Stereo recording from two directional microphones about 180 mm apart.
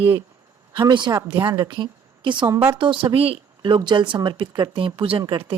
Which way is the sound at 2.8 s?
30° right (ahead or behind).